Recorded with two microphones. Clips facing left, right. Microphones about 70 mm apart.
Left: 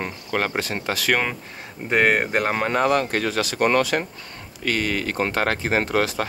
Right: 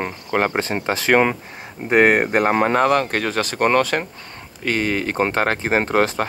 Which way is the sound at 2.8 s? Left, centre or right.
Right.